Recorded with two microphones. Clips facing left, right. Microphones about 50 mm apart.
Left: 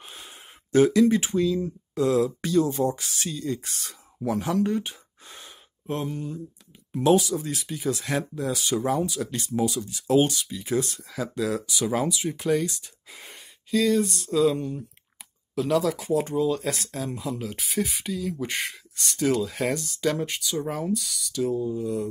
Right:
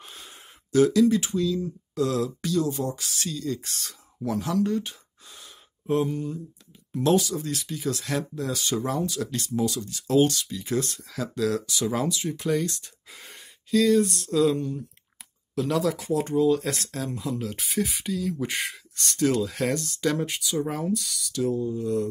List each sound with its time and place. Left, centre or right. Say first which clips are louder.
0.0 s a sound: left 1 dB; centre
0.7 s speech: left 1 dB; left
4.4 s speech: even; left
5.9 s speech: right 5 dB; centre
6.9 s speech: left 2 dB; centre
8.0 s speech: left 1 dB; left
8.4 s speech: left 1 dB; centre
14.6 s speech: right 1 dB; centre
15.5 s speech: left 1 dB; centre